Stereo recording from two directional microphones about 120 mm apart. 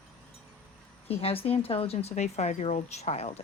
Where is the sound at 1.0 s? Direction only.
55° left (ahead or behind).